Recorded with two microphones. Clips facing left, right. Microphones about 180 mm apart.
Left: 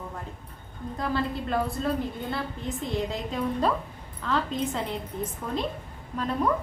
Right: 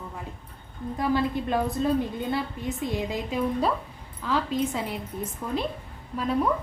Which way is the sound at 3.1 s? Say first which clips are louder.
Right 2 dB; 10° right (ahead or behind).